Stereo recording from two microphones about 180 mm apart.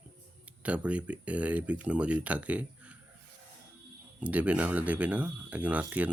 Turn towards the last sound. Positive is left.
turn(degrees=-10)  # may be behind; listen again after turning